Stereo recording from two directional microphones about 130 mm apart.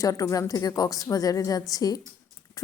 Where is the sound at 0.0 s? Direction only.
25° left (ahead or behind).